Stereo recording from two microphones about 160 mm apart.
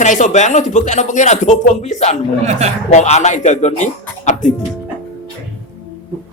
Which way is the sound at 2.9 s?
45° left (ahead or behind).